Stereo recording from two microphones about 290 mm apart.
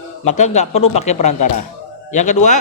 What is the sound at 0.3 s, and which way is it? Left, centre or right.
A man's voice, left.